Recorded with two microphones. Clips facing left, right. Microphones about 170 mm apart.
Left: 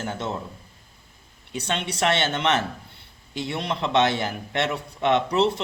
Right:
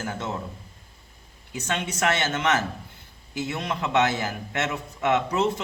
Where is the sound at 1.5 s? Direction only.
30° left (ahead or behind).